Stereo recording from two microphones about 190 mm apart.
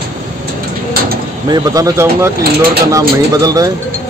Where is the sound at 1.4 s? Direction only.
20° right (ahead or behind).